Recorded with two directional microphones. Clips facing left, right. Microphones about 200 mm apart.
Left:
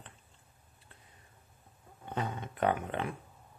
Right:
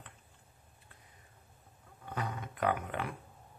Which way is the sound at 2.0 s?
25° left (ahead or behind).